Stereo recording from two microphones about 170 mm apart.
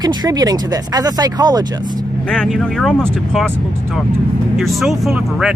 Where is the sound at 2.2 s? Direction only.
5° left (ahead or behind).